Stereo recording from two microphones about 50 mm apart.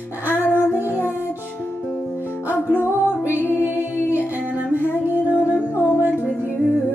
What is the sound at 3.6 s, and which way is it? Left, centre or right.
A capella, right.